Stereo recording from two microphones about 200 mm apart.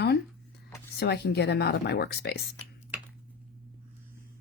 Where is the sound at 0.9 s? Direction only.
55° left (ahead or behind).